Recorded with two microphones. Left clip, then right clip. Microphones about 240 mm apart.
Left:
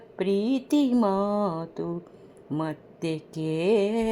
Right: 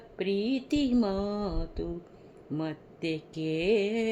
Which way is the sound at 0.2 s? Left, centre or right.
Centre.